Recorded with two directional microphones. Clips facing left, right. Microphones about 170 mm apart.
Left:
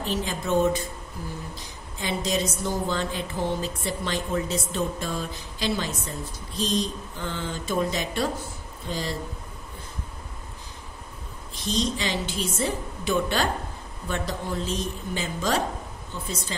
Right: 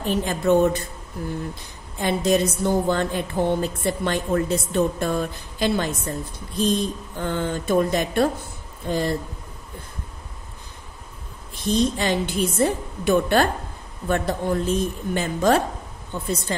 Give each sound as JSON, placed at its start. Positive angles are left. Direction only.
{"t": 0.0, "sound": "a woman's voice", "side_deg": -55}
{"t": 11.5, "sound": "a woman's voice", "side_deg": -55}